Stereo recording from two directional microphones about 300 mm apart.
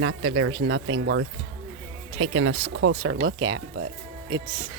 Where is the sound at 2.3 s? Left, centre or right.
Right.